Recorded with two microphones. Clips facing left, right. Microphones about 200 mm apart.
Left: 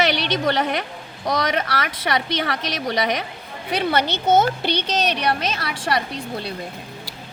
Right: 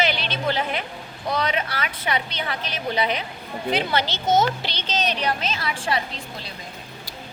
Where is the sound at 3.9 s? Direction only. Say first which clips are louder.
Left 5 dB; 60° left (ahead or behind).